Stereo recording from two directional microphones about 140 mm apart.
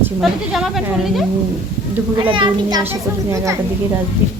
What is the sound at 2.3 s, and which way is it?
Speech, 30° right (ahead or behind).